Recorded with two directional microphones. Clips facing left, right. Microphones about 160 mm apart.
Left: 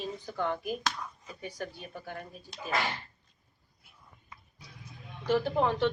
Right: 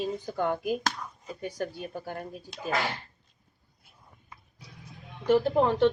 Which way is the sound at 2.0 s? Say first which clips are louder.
Right 3 dB; 40° right (ahead or behind).